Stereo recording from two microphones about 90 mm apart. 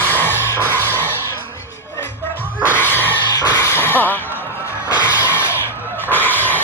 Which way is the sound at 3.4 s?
50° left (ahead or behind).